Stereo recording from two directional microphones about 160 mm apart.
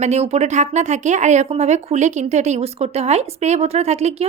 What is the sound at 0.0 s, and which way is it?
Speech, 40° right (ahead or behind).